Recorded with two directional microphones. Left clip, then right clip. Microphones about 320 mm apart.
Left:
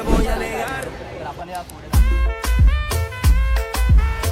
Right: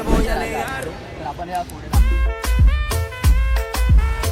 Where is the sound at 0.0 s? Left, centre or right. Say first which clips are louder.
Even; centre.